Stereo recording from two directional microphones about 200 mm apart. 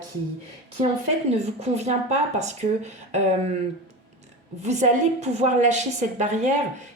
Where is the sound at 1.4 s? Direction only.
35° right (ahead or behind).